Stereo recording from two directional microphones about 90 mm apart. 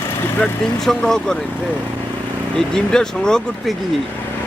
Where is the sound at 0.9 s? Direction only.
5° left (ahead or behind).